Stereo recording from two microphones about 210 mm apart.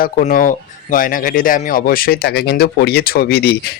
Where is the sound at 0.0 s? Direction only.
40° left (ahead or behind).